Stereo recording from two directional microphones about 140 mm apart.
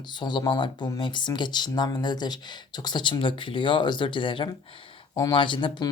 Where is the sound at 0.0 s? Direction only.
30° left (ahead or behind).